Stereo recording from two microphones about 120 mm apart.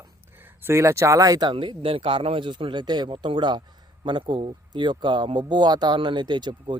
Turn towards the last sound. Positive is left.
turn(degrees=-40)  # may be behind; listen again after turning